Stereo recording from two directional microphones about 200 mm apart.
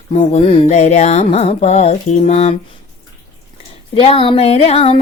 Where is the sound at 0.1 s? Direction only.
35° left (ahead or behind).